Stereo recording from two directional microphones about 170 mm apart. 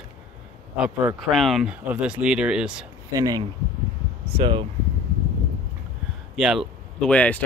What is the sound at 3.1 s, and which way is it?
Speech, 20° right (ahead or behind).